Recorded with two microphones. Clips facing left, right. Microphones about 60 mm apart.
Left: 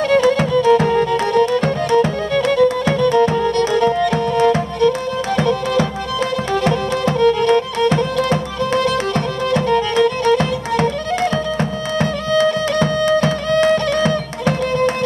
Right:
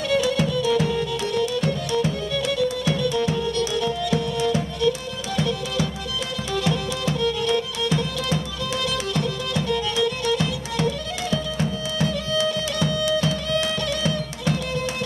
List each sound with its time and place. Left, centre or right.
0.1 s music: left